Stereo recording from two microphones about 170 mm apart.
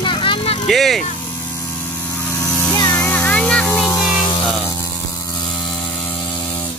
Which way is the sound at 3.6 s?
20° left (ahead or behind).